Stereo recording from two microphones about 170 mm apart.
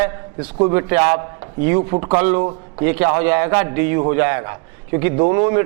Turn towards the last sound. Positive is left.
turn(degrees=-20)  # may be behind; listen again after turning